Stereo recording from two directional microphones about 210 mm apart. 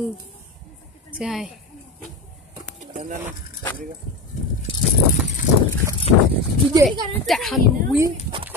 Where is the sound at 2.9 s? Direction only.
40° right (ahead or behind).